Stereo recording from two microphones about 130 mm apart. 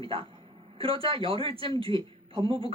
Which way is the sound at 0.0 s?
40° right (ahead or behind).